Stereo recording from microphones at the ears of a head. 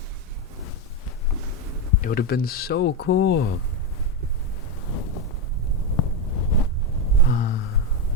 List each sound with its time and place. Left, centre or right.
1.7 s speech: left
4.9 s wind noise: left
6.0 s a sound: left